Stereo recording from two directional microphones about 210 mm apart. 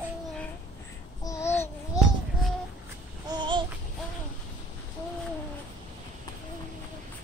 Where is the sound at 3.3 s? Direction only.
20° right (ahead or behind).